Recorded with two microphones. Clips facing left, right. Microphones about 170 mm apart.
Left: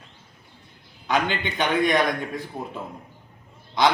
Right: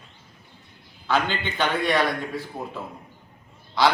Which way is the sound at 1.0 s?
15° left (ahead or behind).